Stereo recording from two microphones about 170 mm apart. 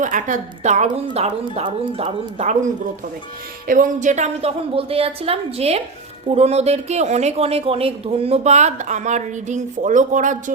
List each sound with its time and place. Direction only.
0.0 s a woman's voice: 50° right (ahead or behind)
3.7 s speech: 50° right (ahead or behind)